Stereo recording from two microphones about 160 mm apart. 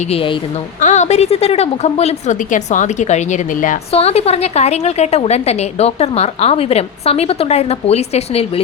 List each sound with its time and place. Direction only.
0.0 s a woman's voice: 35° left (ahead or behind)
0.8 s a woman's voice: 50° left (ahead or behind)
3.9 s a woman's voice: 40° left (ahead or behind)